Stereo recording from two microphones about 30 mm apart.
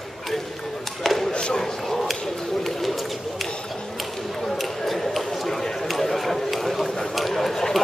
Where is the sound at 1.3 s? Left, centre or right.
Left.